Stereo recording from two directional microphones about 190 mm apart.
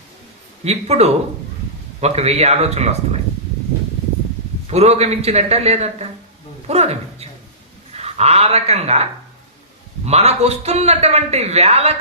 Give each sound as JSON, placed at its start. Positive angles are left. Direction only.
{"t": 0.6, "sound": "a man's voice", "side_deg": -35}
{"t": 4.6, "sound": "a man's voice", "side_deg": -35}
{"t": 10.1, "sound": "a man's voice", "side_deg": -35}